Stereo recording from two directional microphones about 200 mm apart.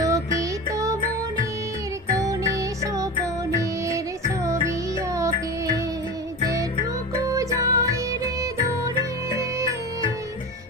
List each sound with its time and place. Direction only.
0.0 s music: 15° right (ahead or behind)
2.1 s music: 15° right (ahead or behind)
7.3 s music: 15° right (ahead or behind)